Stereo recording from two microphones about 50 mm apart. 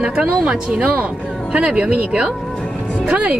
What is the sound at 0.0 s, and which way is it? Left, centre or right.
Speech, centre.